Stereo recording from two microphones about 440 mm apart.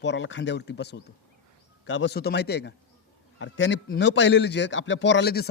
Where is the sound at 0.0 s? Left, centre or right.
Left.